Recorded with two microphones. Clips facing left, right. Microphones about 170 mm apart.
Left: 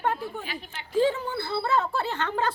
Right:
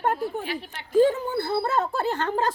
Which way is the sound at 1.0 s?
45° right (ahead or behind).